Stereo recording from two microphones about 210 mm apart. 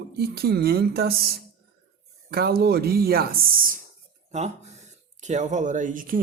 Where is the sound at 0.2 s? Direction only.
50° right (ahead or behind).